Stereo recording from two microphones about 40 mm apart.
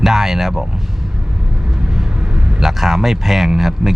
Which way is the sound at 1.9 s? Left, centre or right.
Right.